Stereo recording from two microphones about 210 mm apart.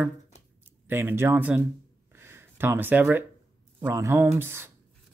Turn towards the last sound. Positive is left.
turn(degrees=-10)  # may be behind; listen again after turning